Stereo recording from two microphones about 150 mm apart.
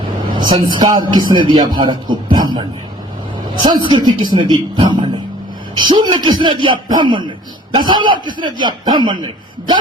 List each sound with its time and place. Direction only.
0.3 s a woman's voice: 30° right (ahead or behind)